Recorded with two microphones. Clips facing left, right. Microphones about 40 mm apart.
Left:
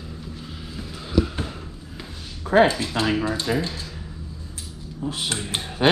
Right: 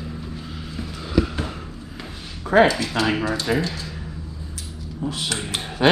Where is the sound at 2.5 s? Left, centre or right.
Right.